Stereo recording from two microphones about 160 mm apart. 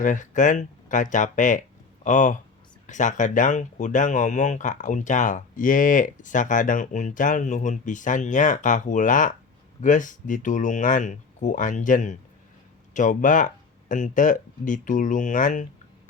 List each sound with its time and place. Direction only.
0.0 s speech: 55° left (ahead or behind)